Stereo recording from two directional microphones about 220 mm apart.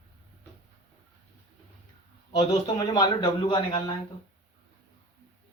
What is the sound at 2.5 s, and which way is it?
Speech, 20° left (ahead or behind).